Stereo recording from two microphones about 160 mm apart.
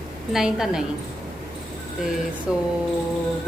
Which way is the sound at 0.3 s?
5° right (ahead or behind).